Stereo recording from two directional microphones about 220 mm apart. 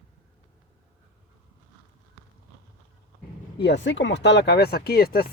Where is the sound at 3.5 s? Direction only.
50° left (ahead or behind).